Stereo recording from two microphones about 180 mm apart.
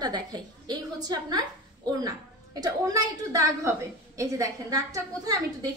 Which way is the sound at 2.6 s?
20° right (ahead or behind).